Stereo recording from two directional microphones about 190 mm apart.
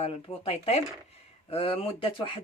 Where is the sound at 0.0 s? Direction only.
30° left (ahead or behind).